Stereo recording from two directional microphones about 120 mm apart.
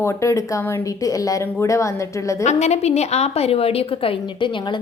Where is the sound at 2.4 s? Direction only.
65° left (ahead or behind); by 4.7 s 45° left (ahead or behind).